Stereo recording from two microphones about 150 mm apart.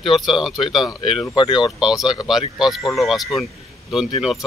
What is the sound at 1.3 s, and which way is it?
Speech, 30° left (ahead or behind).